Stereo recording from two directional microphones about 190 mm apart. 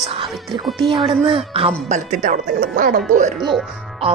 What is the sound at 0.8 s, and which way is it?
Speech, 25° right (ahead or behind).